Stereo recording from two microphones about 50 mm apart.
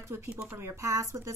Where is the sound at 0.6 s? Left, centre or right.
Right.